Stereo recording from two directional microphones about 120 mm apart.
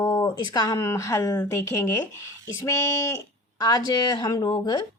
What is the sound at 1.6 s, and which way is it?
Speech, 20° left (ahead or behind).